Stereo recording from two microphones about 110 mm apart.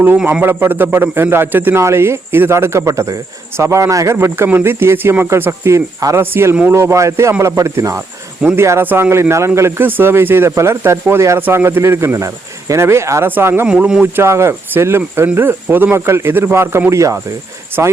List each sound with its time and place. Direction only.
0.3 s a man's voice: 20° right (ahead or behind)
13.7 s speech: 10° right (ahead or behind)
14.2 s a man's voice: 25° right (ahead or behind)